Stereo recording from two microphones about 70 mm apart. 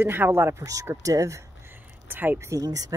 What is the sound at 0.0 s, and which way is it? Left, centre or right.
Speech, right.